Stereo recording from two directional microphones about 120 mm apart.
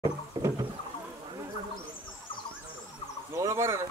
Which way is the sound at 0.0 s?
35° right (ahead or behind).